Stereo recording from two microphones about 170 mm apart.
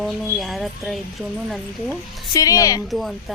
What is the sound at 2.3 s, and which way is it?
Speech, 20° left (ahead or behind).